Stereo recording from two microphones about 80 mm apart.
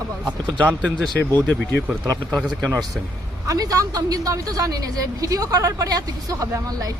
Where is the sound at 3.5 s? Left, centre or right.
Right.